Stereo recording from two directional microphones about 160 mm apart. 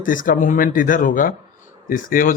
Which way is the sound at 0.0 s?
60° left (ahead or behind).